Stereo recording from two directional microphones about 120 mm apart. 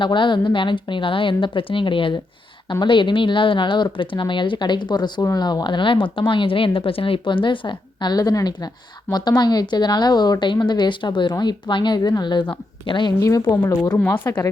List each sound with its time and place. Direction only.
0.0 s a woman's voice: 40° left (ahead or behind)
13.1 s a woman's voice: 30° left (ahead or behind)